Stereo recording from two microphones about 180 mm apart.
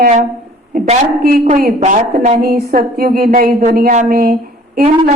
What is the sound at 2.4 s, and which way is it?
A woman's voice, 55° right (ahead or behind).